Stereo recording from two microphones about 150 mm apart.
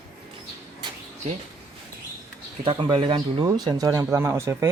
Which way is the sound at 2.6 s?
35° right (ahead or behind).